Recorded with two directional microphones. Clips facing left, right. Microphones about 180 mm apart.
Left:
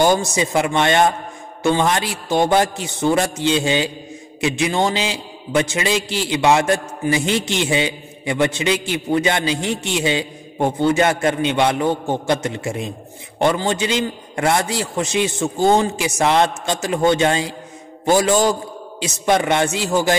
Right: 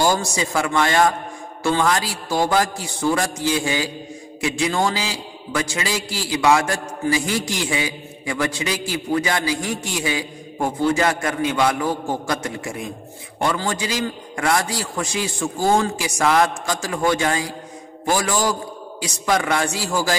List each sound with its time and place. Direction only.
0.0 s a man's voice: 20° left (ahead or behind)